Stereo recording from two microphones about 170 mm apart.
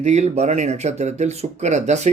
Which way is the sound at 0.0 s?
40° right (ahead or behind).